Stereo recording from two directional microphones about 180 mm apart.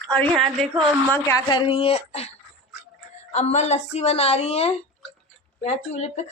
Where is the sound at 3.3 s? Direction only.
40° left (ahead or behind).